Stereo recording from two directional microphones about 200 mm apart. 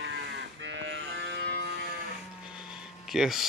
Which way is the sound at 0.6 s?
65° right (ahead or behind).